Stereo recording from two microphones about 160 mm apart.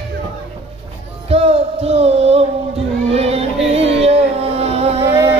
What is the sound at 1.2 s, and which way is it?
Music, 40° right (ahead or behind).